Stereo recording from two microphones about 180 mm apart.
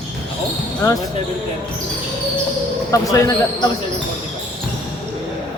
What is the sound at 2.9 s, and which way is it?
Speech, 20° left (ahead or behind).